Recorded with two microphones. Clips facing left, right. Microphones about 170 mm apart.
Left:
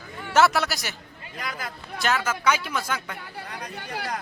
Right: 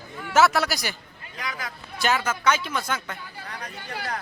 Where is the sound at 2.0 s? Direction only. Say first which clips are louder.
Right 1 dB; centre (ahead or behind).